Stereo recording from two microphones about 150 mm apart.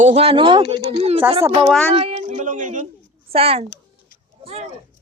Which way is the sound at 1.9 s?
40° right (ahead or behind).